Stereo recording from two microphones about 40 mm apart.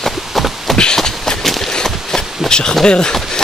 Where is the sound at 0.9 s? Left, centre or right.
Centre.